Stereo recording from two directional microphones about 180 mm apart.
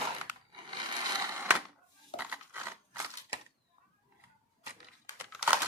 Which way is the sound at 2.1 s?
10° right (ahead or behind).